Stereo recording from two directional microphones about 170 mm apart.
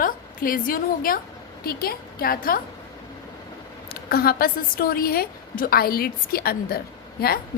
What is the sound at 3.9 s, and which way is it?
A woman's voice, 65° left (ahead or behind).